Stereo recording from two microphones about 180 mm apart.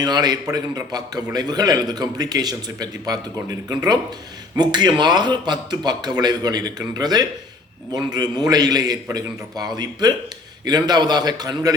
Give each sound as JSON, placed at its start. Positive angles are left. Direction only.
{"t": 0.0, "sound": "a man's voice", "side_deg": -20}